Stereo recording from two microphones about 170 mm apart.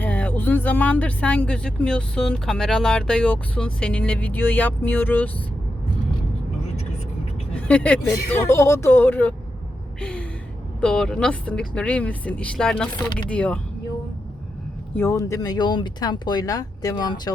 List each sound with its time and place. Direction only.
0.0 s speech: 10° left (ahead or behind)
7.5 s speech: 10° left (ahead or behind)
10.0 s a sound: 5° left (ahead or behind)
10.8 s speech: 5° left (ahead or behind)
14.9 s speech: 15° left (ahead or behind)